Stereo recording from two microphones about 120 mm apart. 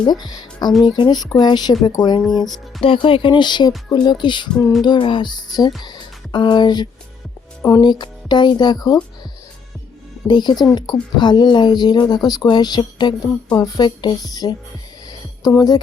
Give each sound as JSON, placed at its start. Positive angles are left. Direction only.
{"t": 0.0, "sound": "speech", "side_deg": 35}
{"t": 2.8, "sound": "speech", "side_deg": 45}
{"t": 10.2, "sound": "speech", "side_deg": 40}